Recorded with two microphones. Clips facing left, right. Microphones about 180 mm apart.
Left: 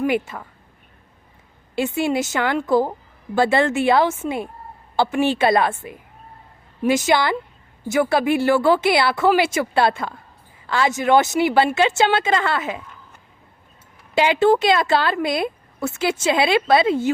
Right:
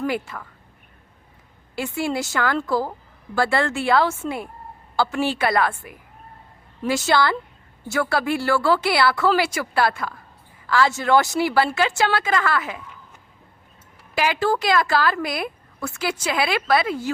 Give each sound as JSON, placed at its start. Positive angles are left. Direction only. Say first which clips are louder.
{"t": 0.0, "sound": "speech", "louder": "left 4 dB", "side_deg": 20}
{"t": 1.7, "sound": "a woman's voice", "louder": "left 4 dB", "side_deg": 20}
{"t": 14.2, "sound": "a woman's voice", "louder": "left 6 dB", "side_deg": 25}